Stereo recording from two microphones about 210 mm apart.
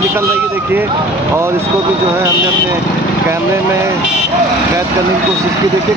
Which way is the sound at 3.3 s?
15° right (ahead or behind).